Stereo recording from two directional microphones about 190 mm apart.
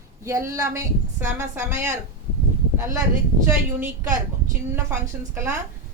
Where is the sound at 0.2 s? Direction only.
15° right (ahead or behind).